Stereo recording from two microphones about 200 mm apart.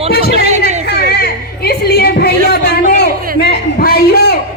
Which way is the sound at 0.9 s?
55° left (ahead or behind).